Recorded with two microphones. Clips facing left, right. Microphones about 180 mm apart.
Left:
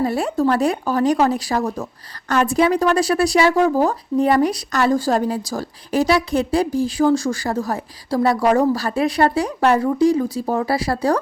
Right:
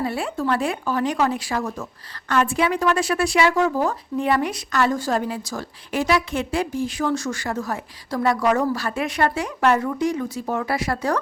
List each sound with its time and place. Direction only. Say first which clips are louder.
0.0 s speech: left 6 dB; 40° left (ahead or behind)